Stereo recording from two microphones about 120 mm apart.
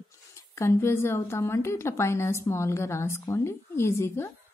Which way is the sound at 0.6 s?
20° left (ahead or behind).